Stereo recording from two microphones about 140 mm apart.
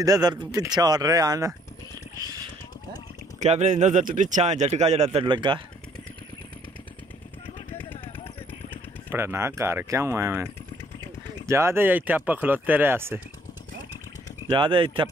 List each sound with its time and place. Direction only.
0.0 s speech: 25° right (ahead or behind)
3.3 s speech: 55° right (ahead or behind)
5.2 s speech: 35° right (ahead or behind)
9.1 s speech: 15° right (ahead or behind)
14.5 s speech: 35° right (ahead or behind)